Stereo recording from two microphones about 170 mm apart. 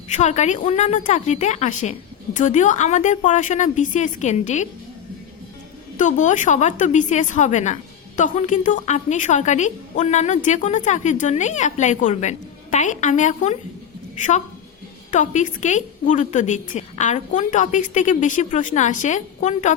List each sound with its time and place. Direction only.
0.1 s a woman's voice: 45° left (ahead or behind)
6.0 s a woman's voice: 45° left (ahead or behind)